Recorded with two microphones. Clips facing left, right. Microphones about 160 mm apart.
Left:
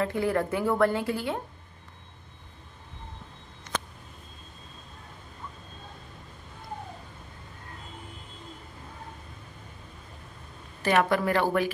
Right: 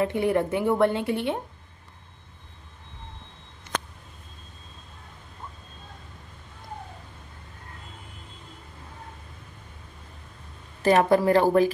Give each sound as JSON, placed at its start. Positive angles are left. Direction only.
{"t": 0.0, "sound": "a woman's voice", "side_deg": -20}
{"t": 10.8, "sound": "speech", "side_deg": -35}